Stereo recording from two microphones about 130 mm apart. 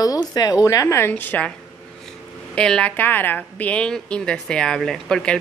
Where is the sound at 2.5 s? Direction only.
5° left (ahead or behind).